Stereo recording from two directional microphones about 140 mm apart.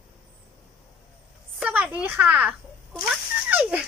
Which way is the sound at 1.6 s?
5° right (ahead or behind).